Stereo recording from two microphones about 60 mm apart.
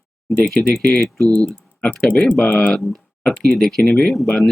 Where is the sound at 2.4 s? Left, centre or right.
Left.